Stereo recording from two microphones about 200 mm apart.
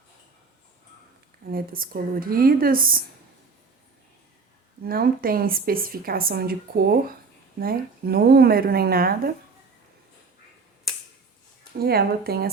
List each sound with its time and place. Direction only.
1.5 s a woman's voice: 45° right (ahead or behind)
4.8 s a woman's voice: 45° right (ahead or behind)
11.8 s a woman's voice: 50° right (ahead or behind)